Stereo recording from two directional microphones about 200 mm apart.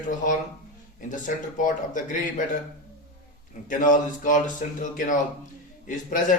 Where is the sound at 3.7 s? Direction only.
40° left (ahead or behind).